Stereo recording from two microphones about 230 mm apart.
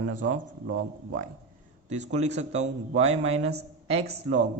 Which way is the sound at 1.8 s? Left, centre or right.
Right.